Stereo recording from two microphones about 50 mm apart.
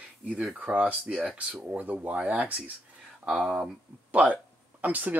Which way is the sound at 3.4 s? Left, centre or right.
Centre.